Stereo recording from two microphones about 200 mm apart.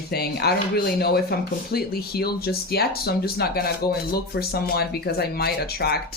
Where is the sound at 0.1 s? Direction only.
50° left (ahead or behind).